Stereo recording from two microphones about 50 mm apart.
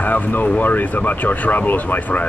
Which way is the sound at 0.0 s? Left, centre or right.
Left.